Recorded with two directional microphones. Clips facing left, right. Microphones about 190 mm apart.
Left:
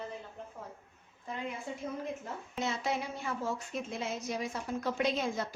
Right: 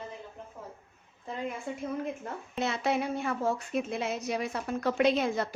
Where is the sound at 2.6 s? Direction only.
65° right (ahead or behind).